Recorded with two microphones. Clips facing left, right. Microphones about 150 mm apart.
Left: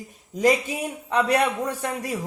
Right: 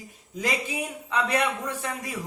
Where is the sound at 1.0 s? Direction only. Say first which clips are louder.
Left 5 dB; 40° left (ahead or behind).